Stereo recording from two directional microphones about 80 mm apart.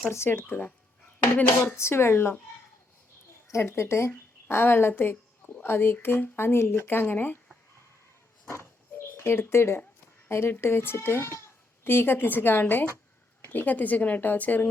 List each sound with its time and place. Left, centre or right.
0.1 s a woman's voice: left
1.7 s speech: left
3.5 s a woman's voice: left
8.4 s a sound: left
10.2 s a woman's voice: left